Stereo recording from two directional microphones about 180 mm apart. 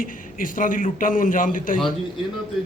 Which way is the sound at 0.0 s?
50° left (ahead or behind).